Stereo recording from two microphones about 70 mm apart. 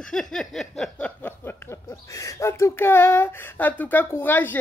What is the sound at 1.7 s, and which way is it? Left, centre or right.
Speech, left.